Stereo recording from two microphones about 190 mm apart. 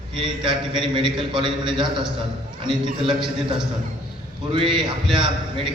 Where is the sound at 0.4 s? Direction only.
25° right (ahead or behind).